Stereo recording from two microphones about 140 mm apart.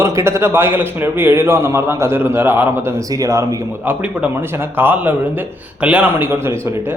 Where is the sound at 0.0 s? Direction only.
20° right (ahead or behind).